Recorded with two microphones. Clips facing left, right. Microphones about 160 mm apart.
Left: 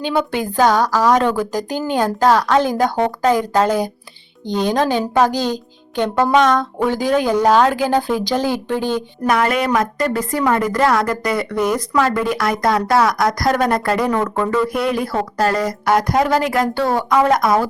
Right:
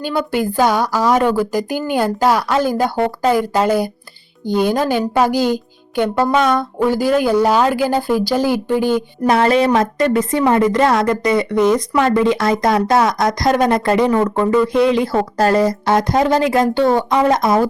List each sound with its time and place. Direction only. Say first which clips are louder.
0.0 s speech: right 1 dB; 5° right (ahead or behind)
9.2 s a woman's voice: right 4 dB; 30° right (ahead or behind)